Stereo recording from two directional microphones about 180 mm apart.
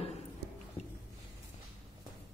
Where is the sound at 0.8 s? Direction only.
40° left (ahead or behind).